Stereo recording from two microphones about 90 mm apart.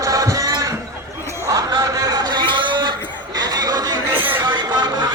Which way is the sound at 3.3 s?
45° right (ahead or behind).